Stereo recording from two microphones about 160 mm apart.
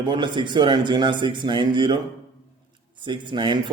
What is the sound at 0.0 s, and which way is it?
Speech, 30° right (ahead or behind).